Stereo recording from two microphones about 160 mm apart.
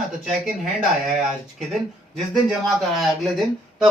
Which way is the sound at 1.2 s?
Centre (ahead or behind).